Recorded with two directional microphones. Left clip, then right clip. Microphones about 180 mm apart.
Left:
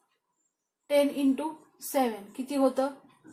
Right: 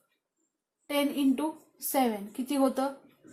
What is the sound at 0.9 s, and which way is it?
A woman's voice, 35° right (ahead or behind).